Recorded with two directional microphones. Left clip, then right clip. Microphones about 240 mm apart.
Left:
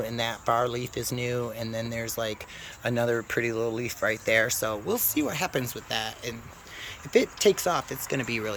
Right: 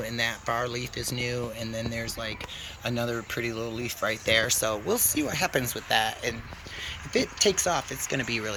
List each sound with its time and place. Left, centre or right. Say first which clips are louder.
0.0 s speech: even; centre
2.1 s speech: left 4 dB; left
2.8 s speech: left 4 dB; centre